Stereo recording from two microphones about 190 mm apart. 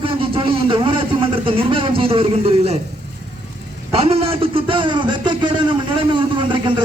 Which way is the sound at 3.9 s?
30° right (ahead or behind).